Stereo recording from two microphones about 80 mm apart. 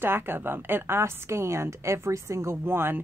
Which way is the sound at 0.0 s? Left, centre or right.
Right.